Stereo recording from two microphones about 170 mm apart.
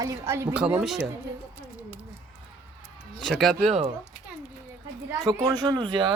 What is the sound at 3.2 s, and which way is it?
Speech, centre (ahead or behind).